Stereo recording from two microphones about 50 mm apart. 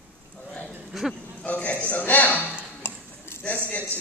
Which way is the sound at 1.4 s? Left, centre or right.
Left.